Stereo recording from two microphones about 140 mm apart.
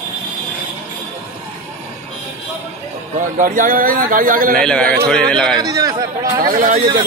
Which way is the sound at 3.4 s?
75° right (ahead or behind).